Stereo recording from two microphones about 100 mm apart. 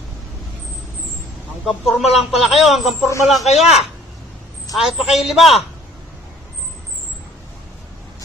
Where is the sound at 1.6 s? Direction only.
Centre (ahead or behind).